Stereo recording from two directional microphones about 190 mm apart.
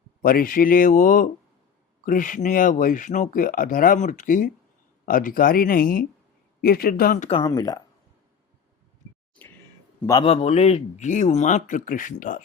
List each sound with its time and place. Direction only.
0.2 s speech: 50° left (ahead or behind)
7.3 s speech: 25° left (ahead or behind)
10.1 s a man's voice: 25° left (ahead or behind); by 12.4 s 40° left (ahead or behind)